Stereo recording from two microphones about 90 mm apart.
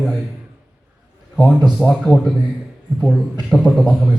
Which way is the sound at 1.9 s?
Centre (ahead or behind).